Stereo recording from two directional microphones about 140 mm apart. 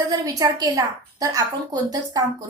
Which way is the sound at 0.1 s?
25° right (ahead or behind).